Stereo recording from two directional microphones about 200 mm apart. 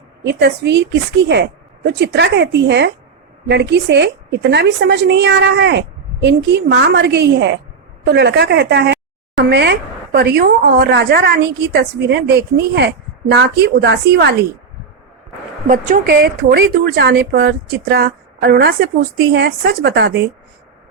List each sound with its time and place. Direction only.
0.3 s speech: 55° right (ahead or behind)
15.6 s speech: 40° right (ahead or behind)
16.0 s speech: 55° right (ahead or behind)